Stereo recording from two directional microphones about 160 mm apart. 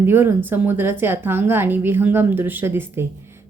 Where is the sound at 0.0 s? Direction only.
15° right (ahead or behind).